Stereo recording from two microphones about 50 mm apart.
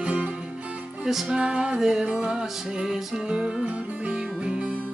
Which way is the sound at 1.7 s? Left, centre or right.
Centre.